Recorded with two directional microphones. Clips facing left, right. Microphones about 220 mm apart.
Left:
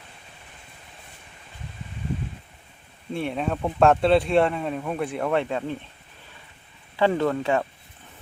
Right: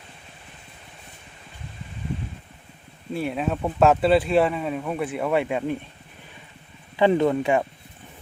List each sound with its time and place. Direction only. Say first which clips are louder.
3.1 s speech: right 1 dB; 5° right (ahead or behind)
6.9 s speech: right 3 dB; 15° right (ahead or behind)